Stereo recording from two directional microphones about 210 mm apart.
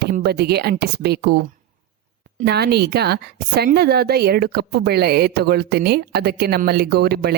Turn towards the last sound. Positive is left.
turn(degrees=-50)  # may be behind; listen again after turning